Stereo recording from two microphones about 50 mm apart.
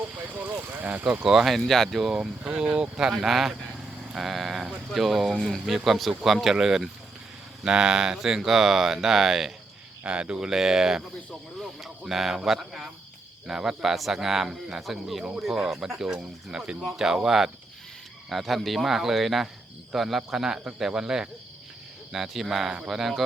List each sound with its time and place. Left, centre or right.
0.0 s speech: right
1.2 s speech: centre
1.5 s speech: centre
2.4 s speech: right
3.1 s speech: centre
5.3 s speech: centre
5.6 s speech: centre
10.1 s speech: right
18.3 s speech: centre